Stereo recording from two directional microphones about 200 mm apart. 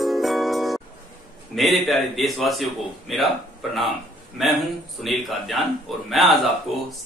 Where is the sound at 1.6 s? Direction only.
Centre (ahead or behind).